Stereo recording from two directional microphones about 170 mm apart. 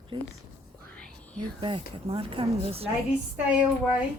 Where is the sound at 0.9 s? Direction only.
5° left (ahead or behind).